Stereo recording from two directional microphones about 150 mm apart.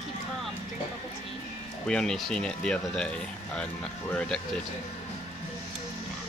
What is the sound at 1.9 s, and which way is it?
Speech, 5° left (ahead or behind).